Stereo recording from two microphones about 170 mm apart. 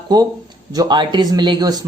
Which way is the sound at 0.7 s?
25° right (ahead or behind).